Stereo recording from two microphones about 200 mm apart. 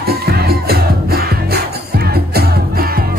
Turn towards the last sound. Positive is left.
turn(degrees=-50)  # may be behind; listen again after turning